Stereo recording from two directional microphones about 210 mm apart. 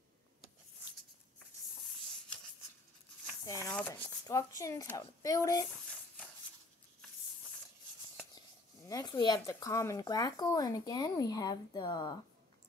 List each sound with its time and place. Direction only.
3.4 s speech: 15° left (ahead or behind)
8.8 s speech: 15° left (ahead or behind)